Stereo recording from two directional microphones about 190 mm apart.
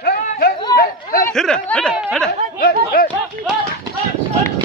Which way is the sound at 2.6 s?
50° left (ahead or behind).